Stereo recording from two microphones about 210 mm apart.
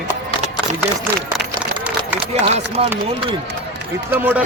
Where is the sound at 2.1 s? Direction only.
25° right (ahead or behind).